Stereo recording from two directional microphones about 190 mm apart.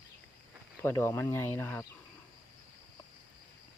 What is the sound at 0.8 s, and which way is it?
Speech, 15° left (ahead or behind).